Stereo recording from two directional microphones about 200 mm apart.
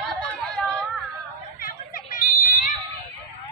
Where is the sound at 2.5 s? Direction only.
40° left (ahead or behind).